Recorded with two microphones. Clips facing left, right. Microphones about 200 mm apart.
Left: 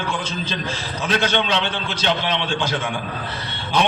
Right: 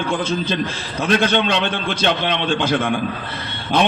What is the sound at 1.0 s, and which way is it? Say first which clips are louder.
A man's voice: right 4 dB; 55° right (ahead or behind).